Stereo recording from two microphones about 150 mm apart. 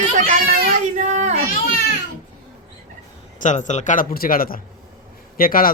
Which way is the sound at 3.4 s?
55° left (ahead or behind).